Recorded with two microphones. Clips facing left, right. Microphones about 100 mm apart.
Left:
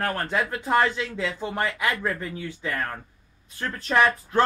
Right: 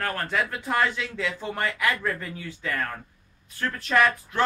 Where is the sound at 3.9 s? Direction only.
35° left (ahead or behind).